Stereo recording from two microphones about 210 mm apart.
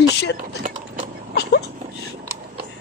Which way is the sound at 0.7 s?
30° right (ahead or behind).